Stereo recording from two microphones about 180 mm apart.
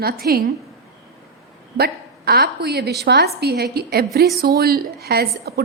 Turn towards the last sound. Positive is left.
turn(degrees=-60)  # may be behind; listen again after turning